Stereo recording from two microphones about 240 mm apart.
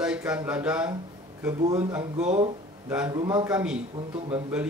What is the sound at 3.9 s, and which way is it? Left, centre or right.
Speech, right.